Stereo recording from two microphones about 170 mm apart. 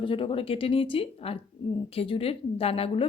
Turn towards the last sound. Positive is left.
turn(degrees=35)  # may be behind; listen again after turning